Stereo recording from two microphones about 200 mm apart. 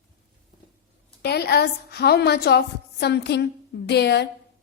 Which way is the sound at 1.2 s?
55° left (ahead or behind).